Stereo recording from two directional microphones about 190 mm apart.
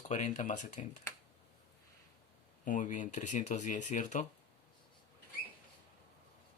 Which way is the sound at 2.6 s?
40° left (ahead or behind).